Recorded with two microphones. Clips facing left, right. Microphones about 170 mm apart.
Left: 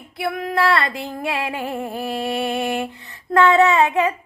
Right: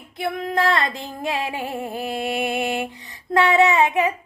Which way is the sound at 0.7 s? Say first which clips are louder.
Left 2 dB; 20° right (ahead or behind).